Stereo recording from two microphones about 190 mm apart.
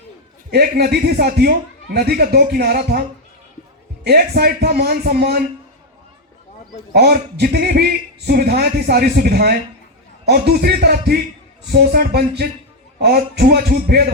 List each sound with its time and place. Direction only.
0.5 s speech: 55° right (ahead or behind)
4.0 s speech: 55° right (ahead or behind)
6.9 s speech: 55° right (ahead or behind)